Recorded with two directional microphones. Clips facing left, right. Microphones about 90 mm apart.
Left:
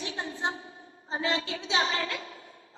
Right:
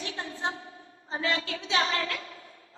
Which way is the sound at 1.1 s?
25° left (ahead or behind).